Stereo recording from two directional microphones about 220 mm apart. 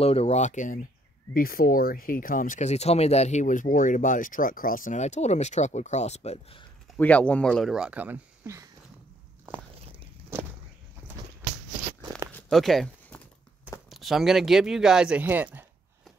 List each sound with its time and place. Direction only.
0.0 s speech: 30° left (ahead or behind)
7.0 s speech: 5° left (ahead or behind); by 8.6 s 10° right (ahead or behind)
12.3 s a sound: 5° left (ahead or behind)
13.8 s speech: centre (ahead or behind)